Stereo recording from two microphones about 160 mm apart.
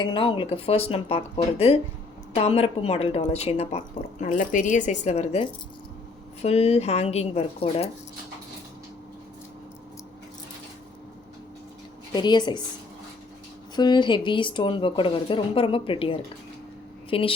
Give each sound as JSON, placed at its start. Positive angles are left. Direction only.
{"t": 0.0, "sound": "speech", "side_deg": 30}
{"t": 4.3, "sound": "speech", "side_deg": 55}
{"t": 12.1, "sound": "a woman's voice", "side_deg": 25}
{"t": 13.7, "sound": "speech", "side_deg": 25}